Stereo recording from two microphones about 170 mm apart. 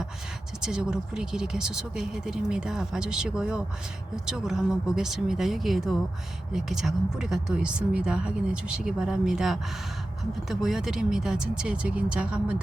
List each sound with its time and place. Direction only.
0.6 s speech: 5° right (ahead or behind)